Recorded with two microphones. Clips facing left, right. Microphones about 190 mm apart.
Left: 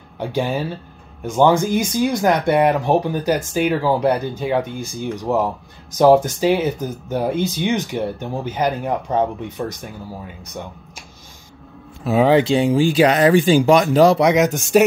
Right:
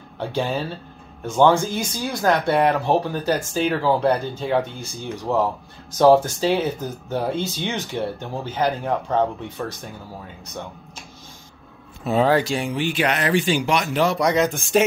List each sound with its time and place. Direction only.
0.2 s speech: 15° left (ahead or behind)
12.0 s speech: 5° left (ahead or behind)
12.3 s speech: 20° left (ahead or behind)
13.2 s speech: 40° left (ahead or behind)